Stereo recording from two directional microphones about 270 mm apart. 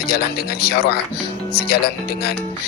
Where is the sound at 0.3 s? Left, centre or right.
Left.